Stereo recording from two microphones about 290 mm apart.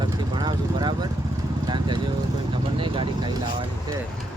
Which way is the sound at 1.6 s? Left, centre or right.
Centre.